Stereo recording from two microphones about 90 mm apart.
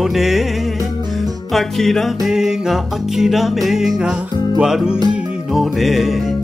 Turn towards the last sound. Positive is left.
turn(degrees=0)  # may be behind; listen again after turning